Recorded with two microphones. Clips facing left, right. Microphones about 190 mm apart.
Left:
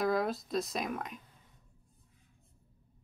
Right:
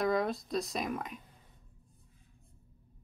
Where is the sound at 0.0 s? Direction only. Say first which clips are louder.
Even; centre (ahead or behind).